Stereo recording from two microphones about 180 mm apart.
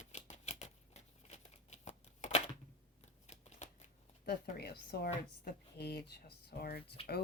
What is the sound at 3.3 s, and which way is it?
Shuffling cards, 40° left (ahead or behind).